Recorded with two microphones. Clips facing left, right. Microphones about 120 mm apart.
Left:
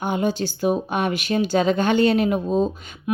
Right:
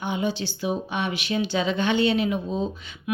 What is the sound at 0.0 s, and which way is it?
A woman's voice, 45° left (ahead or behind).